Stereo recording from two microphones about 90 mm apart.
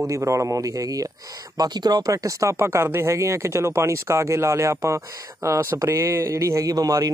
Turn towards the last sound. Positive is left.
turn(degrees=-40)  # may be behind; listen again after turning